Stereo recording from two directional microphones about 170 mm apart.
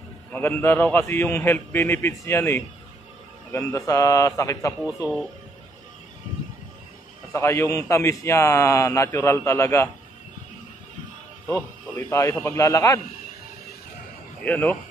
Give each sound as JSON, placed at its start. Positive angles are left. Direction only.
{"t": 0.3, "sound": "a man's voice", "side_deg": 10}
{"t": 7.3, "sound": "a man's voice", "side_deg": 15}
{"t": 11.4, "sound": "a man's voice", "side_deg": 10}
{"t": 14.4, "sound": "a man's voice", "side_deg": 10}